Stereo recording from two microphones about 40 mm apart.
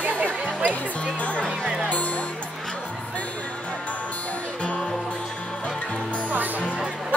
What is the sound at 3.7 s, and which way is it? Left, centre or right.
Music, left.